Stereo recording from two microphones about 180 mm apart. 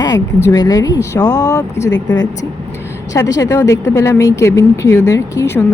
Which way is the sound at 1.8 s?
90° left.